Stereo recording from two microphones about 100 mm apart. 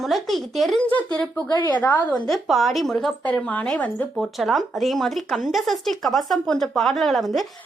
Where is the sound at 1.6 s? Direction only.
20° left (ahead or behind).